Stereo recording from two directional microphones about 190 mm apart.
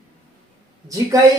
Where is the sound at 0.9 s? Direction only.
15° right (ahead or behind).